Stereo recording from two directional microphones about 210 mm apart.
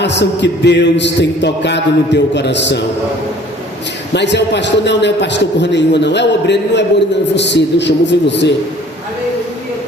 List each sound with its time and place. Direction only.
0.0 s music: 55° left (ahead or behind)
4.1 s music: 55° left (ahead or behind)